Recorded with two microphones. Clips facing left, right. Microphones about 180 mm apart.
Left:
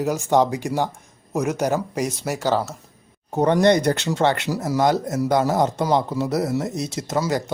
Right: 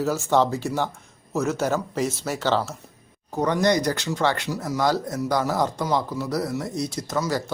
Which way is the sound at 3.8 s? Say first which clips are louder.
Left 4 dB; 25° left (ahead or behind).